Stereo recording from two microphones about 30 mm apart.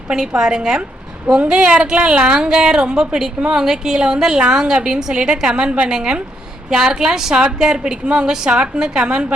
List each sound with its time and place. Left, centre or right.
0.1 s a woman's voice: right
1.5 s a woman's voice: right
3.5 s a woman's voice: centre; by 5.9 s right
5.9 s a woman's voice: right
7.6 s a woman's voice: right